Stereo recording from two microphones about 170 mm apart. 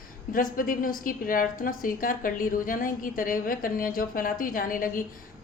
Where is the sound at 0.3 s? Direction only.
55° left (ahead or behind).